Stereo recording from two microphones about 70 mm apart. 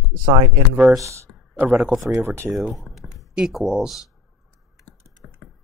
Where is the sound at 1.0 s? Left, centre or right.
Right.